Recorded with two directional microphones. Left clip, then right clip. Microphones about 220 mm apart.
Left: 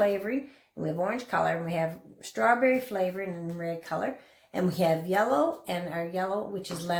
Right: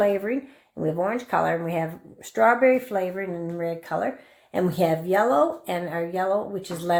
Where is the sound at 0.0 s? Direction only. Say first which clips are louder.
Right 4 dB; 40° right (ahead or behind).